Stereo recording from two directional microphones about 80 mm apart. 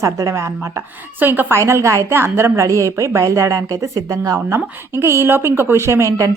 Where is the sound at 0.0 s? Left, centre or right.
Right.